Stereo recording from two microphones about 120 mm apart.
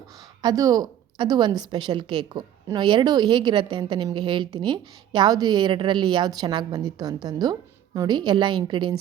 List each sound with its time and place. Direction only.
0.4 s a woman's voice: 35° right (ahead or behind)